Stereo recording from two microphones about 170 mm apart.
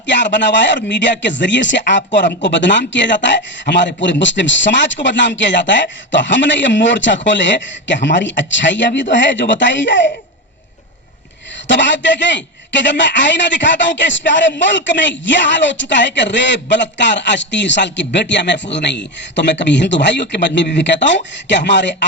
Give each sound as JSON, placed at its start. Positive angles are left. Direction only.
{"t": 0.0, "sound": "a man's voice", "side_deg": 90}
{"t": 11.7, "sound": "a man's voice", "side_deg": 90}